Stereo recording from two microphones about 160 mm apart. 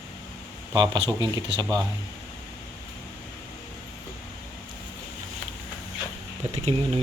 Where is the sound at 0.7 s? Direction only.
25° right (ahead or behind).